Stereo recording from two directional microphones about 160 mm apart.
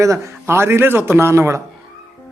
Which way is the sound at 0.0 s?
15° right (ahead or behind).